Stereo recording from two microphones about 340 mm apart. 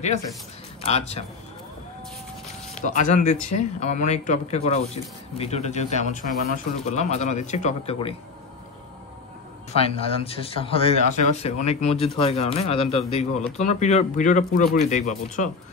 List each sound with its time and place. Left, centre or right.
0.8 s speech: centre
2.7 s speech: left
9.8 s speech: centre